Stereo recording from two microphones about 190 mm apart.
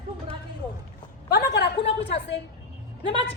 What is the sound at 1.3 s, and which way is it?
A woman's voice, 60° left (ahead or behind).